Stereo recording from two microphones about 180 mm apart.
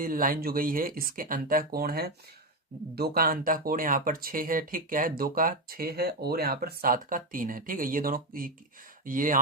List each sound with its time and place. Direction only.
0.0 s speech: 50° right (ahead or behind)